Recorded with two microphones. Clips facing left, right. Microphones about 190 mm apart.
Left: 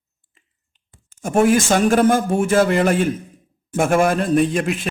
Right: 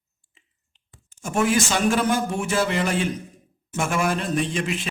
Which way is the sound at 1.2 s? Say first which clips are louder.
Left 6 dB; 50° left (ahead or behind).